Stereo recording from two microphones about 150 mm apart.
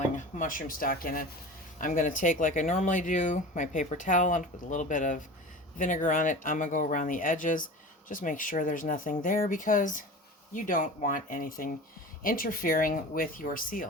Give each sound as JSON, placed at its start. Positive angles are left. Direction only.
{"t": 0.2, "sound": "speech", "side_deg": 60}